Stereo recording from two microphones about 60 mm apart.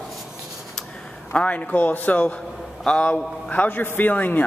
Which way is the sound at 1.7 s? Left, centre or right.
Left.